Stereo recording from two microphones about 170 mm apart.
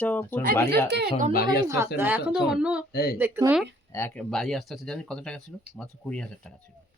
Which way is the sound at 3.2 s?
10° right (ahead or behind).